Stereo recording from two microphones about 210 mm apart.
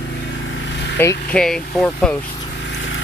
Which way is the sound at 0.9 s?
5° left (ahead or behind).